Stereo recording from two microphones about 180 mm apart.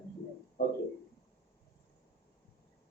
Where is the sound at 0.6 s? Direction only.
55° left (ahead or behind).